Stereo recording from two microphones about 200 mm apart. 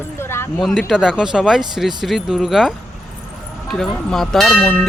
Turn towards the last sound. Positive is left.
turn(degrees=5)  # may be behind; listen again after turning